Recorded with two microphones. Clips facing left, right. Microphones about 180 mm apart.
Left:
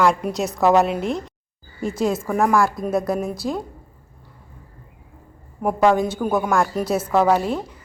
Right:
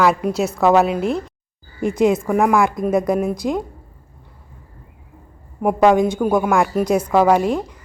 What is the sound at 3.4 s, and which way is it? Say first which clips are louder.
Speech: right 4 dB; 15° right (ahead or behind).